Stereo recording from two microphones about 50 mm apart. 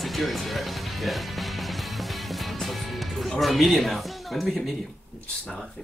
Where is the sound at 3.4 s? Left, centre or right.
Centre.